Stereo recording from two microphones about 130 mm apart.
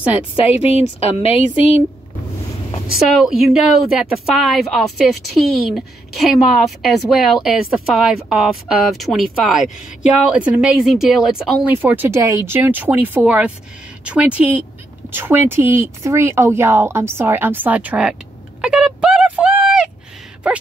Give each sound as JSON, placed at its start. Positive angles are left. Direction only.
{"t": 0.0, "sound": "speech", "side_deg": -10}
{"t": 0.6, "sound": "speech", "side_deg": 55}
{"t": 3.2, "sound": "speech", "side_deg": -5}
{"t": 18.6, "sound": "a sound", "side_deg": -5}